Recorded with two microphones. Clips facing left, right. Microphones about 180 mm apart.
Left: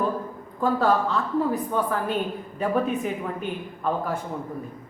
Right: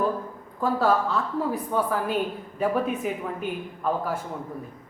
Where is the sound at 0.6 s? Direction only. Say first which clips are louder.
Left 1 dB; 5° right (ahead or behind).